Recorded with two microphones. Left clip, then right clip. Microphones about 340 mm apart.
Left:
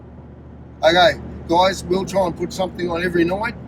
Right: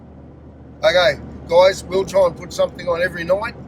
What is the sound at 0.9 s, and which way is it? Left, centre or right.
Speech, centre.